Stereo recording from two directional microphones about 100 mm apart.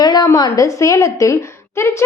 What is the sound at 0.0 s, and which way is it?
A woman's voice, 45° left (ahead or behind).